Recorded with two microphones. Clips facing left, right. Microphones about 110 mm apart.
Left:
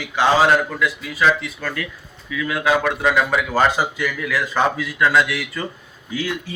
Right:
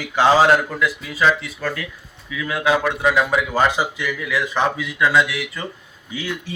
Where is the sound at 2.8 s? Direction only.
5° right (ahead or behind).